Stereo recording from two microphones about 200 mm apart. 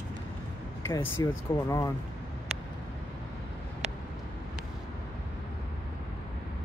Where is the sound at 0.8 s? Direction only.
15° left (ahead or behind).